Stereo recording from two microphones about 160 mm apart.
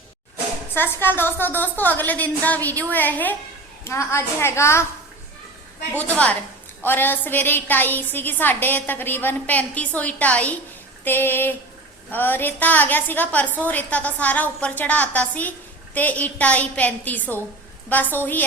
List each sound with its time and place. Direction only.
0.7 s a woman's voice: 15° left (ahead or behind)
6.0 s a woman's voice: 10° left (ahead or behind)